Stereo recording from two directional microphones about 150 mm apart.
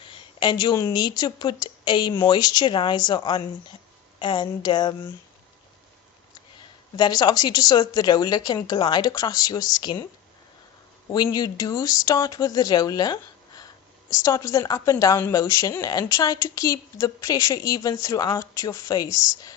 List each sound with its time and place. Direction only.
0.0 s a woman's voice: 35° left (ahead or behind)
6.6 s a woman's voice: 30° left (ahead or behind)
11.1 s a woman's voice: 25° left (ahead or behind)